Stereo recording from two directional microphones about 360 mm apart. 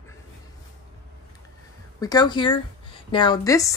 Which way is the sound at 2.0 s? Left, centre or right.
Centre.